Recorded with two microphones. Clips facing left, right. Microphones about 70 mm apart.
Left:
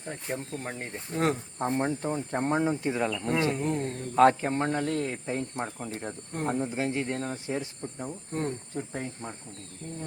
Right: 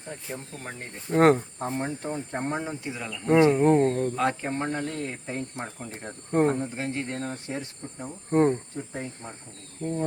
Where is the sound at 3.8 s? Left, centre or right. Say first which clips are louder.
Right 10 dB; right.